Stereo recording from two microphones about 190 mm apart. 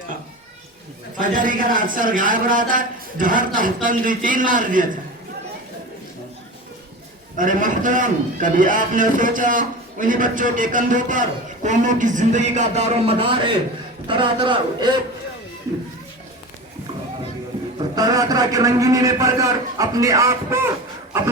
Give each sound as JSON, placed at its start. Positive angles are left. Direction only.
{"t": 1.2, "sound": "a man's voice", "side_deg": -45}
{"t": 7.3, "sound": "a man's voice", "side_deg": -45}
{"t": 17.9, "sound": "a man's voice", "side_deg": -20}